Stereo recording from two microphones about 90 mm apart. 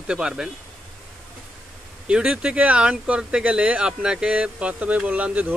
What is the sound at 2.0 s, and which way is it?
Speech, 10° right (ahead or behind).